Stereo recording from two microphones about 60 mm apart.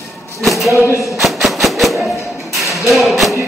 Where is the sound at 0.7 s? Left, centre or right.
Left.